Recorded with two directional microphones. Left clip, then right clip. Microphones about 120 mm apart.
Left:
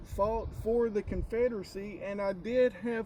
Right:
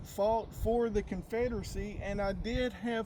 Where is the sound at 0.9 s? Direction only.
25° right (ahead or behind).